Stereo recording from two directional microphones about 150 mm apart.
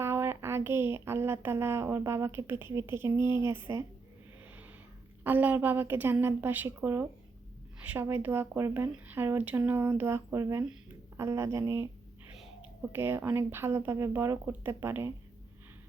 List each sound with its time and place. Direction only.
0.0 s speech: 15° right (ahead or behind)
5.2 s speech: 10° right (ahead or behind)
12.9 s speech: 15° right (ahead or behind)